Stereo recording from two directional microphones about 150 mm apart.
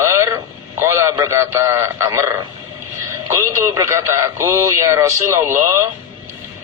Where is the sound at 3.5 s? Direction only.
20° right (ahead or behind).